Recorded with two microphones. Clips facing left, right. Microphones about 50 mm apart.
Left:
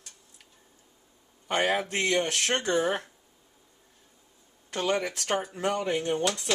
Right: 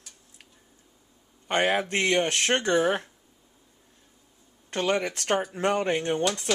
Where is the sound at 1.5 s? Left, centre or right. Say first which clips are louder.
Right 2 dB; right.